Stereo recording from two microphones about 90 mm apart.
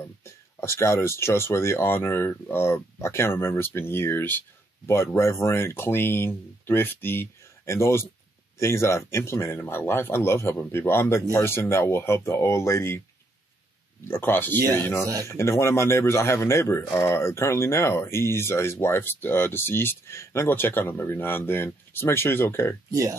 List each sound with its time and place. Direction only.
0.2 s speech: 30° left (ahead or behind)
14.0 s speech: 25° left (ahead or behind)
15.0 s speech: 40° right (ahead or behind)
15.3 s speech: 30° left (ahead or behind)
22.8 s speech: 40° right (ahead or behind)